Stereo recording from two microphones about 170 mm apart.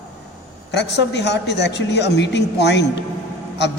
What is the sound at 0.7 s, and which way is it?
A woman's voice, 85° left.